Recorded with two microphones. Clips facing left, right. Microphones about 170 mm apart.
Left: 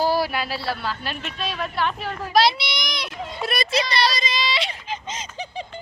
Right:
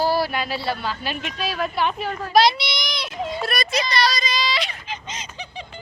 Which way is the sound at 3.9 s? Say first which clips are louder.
Right 1 dB; 25° left (ahead or behind).